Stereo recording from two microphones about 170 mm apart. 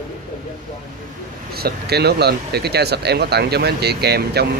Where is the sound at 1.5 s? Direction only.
70° right (ahead or behind).